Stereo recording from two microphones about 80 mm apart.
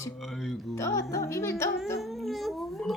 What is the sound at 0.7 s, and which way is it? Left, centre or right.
Speech, left.